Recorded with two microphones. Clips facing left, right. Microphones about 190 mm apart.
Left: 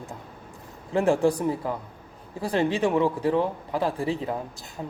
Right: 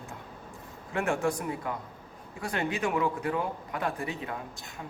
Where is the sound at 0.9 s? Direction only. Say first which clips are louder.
Left 7 dB; 30° left (ahead or behind).